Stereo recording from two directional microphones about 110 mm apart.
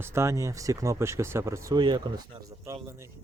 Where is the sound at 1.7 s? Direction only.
40° right (ahead or behind).